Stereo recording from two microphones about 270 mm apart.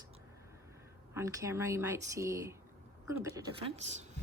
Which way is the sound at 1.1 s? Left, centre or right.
Centre.